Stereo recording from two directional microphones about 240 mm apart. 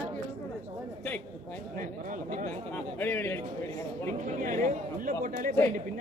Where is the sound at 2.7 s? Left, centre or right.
Centre.